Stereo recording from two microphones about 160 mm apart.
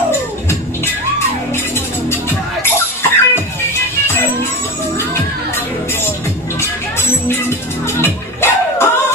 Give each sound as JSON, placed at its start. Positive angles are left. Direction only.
{"t": 2.0, "sound": "music", "side_deg": 15}
{"t": 8.0, "sound": "music", "side_deg": 15}